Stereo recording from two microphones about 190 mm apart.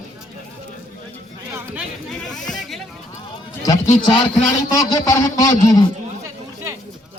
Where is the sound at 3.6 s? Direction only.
20° left (ahead or behind).